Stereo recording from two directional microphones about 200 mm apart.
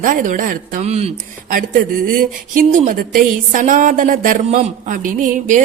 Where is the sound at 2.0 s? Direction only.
45° right (ahead or behind).